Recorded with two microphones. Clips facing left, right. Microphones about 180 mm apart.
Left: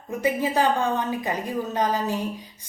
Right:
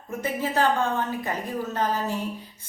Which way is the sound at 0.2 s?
15° left (ahead or behind).